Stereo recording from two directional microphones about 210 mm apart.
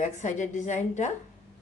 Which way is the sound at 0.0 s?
35° left (ahead or behind).